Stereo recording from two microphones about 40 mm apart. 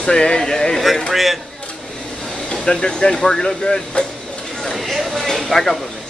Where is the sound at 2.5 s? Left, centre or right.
Centre.